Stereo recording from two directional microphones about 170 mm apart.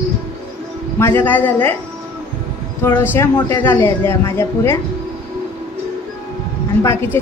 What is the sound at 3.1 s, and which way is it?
A woman's voice, 15° left (ahead or behind).